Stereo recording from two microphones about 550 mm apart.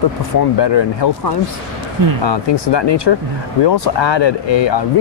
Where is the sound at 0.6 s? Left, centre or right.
Left.